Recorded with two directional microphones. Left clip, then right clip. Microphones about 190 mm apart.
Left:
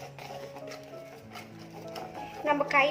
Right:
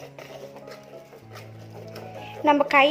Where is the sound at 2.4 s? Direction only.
45° right (ahead or behind).